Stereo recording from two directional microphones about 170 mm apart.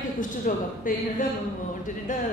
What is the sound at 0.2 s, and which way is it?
Speech, 50° left (ahead or behind).